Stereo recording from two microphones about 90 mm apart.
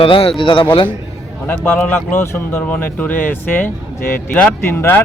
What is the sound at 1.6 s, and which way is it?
Speech, 10° left (ahead or behind).